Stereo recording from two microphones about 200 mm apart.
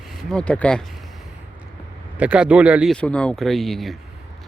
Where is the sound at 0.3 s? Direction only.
5° left (ahead or behind).